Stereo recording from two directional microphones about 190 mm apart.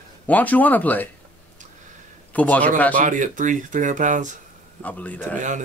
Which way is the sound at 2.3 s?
10° left (ahead or behind).